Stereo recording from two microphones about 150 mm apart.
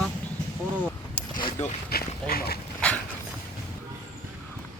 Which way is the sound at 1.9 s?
90° left.